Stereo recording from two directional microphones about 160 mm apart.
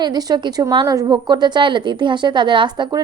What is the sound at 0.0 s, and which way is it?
A woman's voice, 25° right (ahead or behind).